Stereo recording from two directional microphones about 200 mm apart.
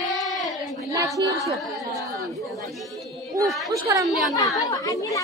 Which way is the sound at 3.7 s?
15° right (ahead or behind).